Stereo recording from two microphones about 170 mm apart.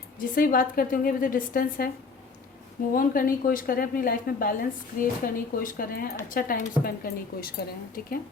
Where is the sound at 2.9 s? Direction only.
55° left (ahead or behind).